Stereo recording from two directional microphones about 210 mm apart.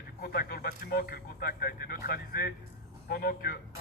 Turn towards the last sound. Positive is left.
turn(degrees=45)  # may be behind; listen again after turning